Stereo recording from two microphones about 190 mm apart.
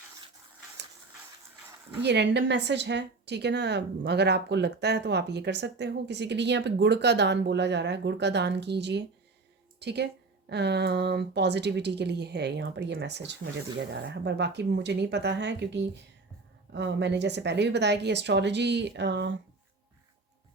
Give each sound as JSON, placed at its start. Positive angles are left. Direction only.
{"t": 2.0, "sound": "a woman's voice", "side_deg": -65}